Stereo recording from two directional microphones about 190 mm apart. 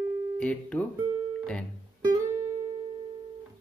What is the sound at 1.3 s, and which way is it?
Music, 5° left (ahead or behind).